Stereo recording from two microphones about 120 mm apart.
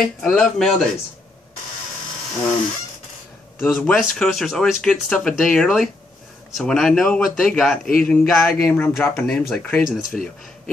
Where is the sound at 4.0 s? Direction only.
Centre (ahead or behind).